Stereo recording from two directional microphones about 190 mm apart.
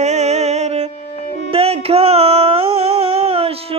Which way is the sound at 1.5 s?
30° right (ahead or behind).